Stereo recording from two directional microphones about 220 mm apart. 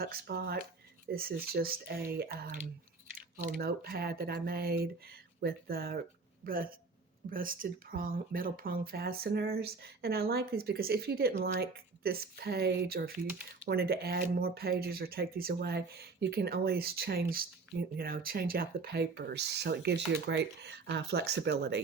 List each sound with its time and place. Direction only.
0.0 s speech: 45° right (ahead or behind)